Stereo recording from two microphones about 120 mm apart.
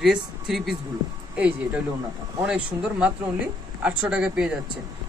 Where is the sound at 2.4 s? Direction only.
10° right (ahead or behind).